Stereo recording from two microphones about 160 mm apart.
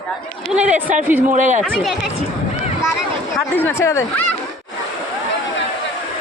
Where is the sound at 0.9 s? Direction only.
50° right (ahead or behind).